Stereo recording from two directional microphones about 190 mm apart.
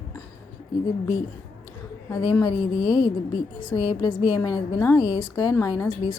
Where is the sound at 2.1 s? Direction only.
20° left (ahead or behind).